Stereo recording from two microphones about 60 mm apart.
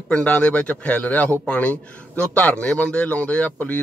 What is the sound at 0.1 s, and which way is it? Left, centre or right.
Speech, left.